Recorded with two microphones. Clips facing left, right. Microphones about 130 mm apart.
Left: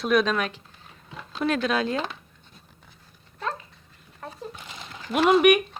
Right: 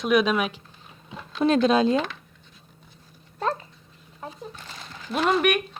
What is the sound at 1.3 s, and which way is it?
Speech, 25° right (ahead or behind).